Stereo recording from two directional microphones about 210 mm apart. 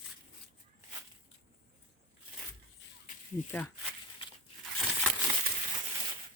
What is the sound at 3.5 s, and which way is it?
Speech, 10° left (ahead or behind).